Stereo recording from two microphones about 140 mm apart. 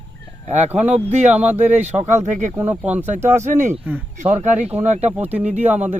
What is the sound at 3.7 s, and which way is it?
Speech, 15° right (ahead or behind).